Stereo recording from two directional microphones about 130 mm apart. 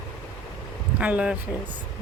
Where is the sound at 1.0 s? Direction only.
10° right (ahead or behind).